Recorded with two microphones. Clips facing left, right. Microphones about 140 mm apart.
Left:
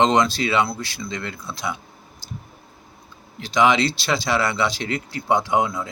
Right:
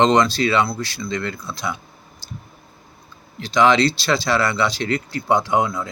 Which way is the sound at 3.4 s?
15° left (ahead or behind).